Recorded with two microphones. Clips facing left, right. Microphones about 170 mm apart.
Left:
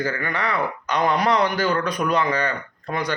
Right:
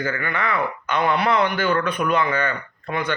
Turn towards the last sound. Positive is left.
turn(degrees=35)  # may be behind; listen again after turning